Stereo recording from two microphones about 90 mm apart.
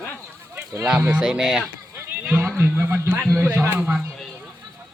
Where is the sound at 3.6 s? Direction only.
20° right (ahead or behind).